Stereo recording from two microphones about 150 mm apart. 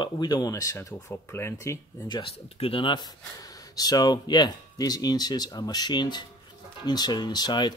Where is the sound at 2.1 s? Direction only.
35° left (ahead or behind).